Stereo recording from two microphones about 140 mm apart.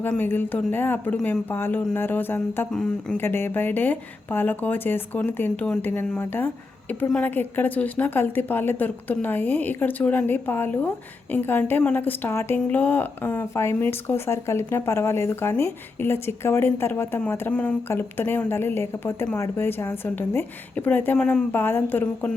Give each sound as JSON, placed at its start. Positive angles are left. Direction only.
{"t": 0.0, "sound": "speech", "side_deg": 15}